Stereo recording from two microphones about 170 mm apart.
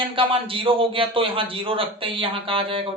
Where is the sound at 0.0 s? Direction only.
30° right (ahead or behind).